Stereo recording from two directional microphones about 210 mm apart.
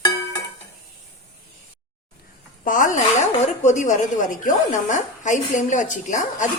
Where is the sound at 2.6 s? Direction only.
40° left (ahead or behind).